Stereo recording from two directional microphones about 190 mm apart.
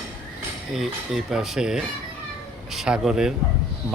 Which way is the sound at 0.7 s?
Centre (ahead or behind).